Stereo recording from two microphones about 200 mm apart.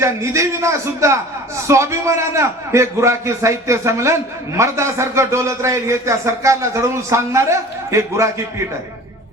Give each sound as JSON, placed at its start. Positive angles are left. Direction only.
{"t": 0.0, "sound": "a man's voice", "side_deg": -15}